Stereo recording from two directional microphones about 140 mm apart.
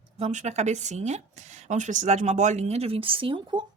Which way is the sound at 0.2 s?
55° right (ahead or behind).